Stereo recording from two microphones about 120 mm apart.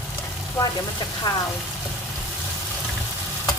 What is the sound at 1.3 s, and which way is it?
Speech, 35° left (ahead or behind).